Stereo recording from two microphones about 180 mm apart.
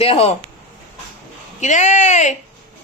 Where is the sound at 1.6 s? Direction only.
40° left (ahead or behind).